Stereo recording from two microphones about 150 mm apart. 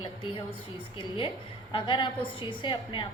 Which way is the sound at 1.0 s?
35° left (ahead or behind).